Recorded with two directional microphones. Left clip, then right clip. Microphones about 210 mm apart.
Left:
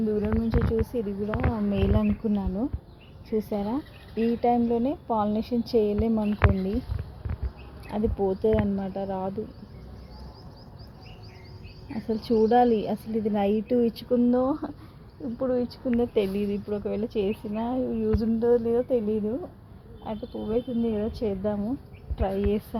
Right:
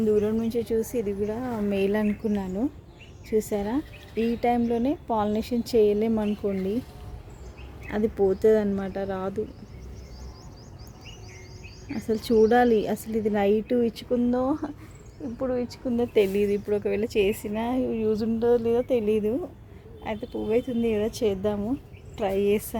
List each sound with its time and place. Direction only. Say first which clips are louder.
0.5 s speech: right 1 dB; 30° right (ahead or behind)
1.5 s speech: right 6 dB; 10° right (ahead or behind)
7.9 s speech: right 3 dB; 25° right (ahead or behind)
8.5 s speech: right 2 dB; 15° right (ahead or behind)
11.9 s speech: right 3 dB; 20° right (ahead or behind); by 16.0 s centre (ahead or behind)
16.1 s speech: right 4 dB; 15° right (ahead or behind)